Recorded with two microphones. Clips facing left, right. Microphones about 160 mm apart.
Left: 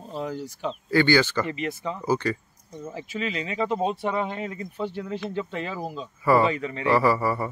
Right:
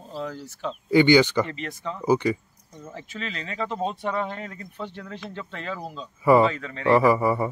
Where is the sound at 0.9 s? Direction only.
15° right (ahead or behind).